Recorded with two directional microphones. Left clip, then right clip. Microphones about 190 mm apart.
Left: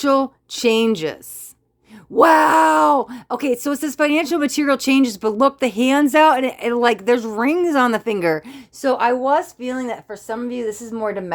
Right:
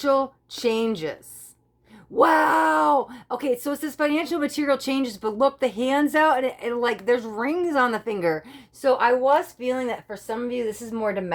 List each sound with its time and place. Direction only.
0.0 s speech: 50° left (ahead or behind)